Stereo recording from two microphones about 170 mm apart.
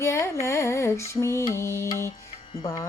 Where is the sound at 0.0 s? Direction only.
15° left (ahead or behind).